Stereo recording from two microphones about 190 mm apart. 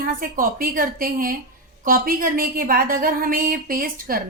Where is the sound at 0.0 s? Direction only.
45° right (ahead or behind).